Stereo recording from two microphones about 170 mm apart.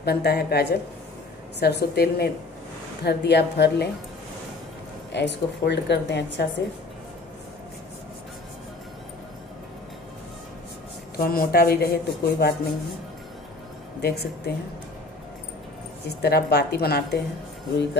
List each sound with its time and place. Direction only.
0.0 s a woman's voice: 70° left (ahead or behind)
5.1 s a woman's voice: 90° left
11.1 s speech: 60° left (ahead or behind)
14.0 s a woman's voice: 70° left (ahead or behind)
16.1 s a woman's voice: 70° left (ahead or behind)